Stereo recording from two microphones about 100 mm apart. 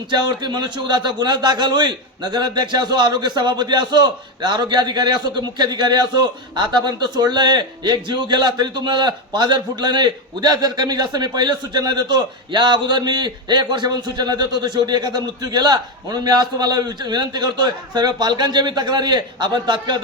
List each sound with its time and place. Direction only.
0.1 s a man's voice: 45° right (ahead or behind)